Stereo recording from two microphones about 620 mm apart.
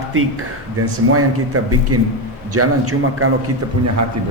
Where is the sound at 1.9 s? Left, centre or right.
Right.